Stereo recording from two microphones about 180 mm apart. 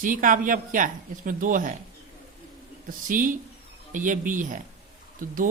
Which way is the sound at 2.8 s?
50° right (ahead or behind).